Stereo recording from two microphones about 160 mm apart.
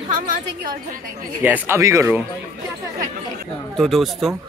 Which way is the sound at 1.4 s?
15° right (ahead or behind).